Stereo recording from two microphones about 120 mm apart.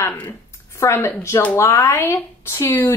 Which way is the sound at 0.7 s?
25° left (ahead or behind).